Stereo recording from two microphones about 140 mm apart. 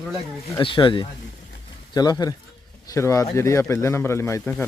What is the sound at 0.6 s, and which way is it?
Speech, 35° left (ahead or behind).